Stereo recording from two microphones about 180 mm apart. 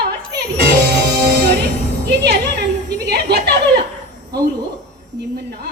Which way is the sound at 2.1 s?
65° right (ahead or behind).